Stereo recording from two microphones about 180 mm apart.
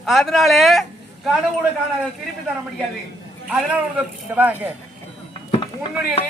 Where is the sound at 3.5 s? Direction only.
10° right (ahead or behind).